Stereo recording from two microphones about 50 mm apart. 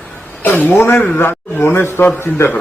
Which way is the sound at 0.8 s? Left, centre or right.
Left.